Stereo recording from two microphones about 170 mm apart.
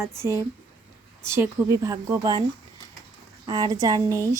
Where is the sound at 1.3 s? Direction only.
15° right (ahead or behind).